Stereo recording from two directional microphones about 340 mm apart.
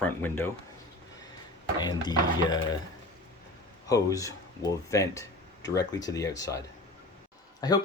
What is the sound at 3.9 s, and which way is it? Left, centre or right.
Speech, centre.